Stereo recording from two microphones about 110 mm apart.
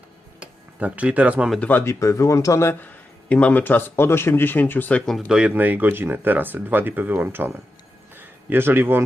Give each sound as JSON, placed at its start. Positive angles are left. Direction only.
{"t": 0.3, "sound": "a sound", "side_deg": -10}
{"t": 1.5, "sound": "speech", "side_deg": 15}
{"t": 1.8, "sound": "speech", "side_deg": 25}
{"t": 3.2, "sound": "speech", "side_deg": 15}
{"t": 5.1, "sound": "speech", "side_deg": -5}
{"t": 8.1, "sound": "a sound", "side_deg": -20}